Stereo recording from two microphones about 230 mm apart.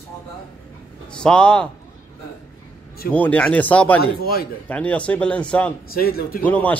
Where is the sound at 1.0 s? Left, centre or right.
Centre.